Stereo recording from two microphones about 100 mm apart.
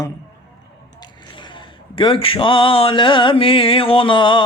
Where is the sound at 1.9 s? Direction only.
60° left (ahead or behind).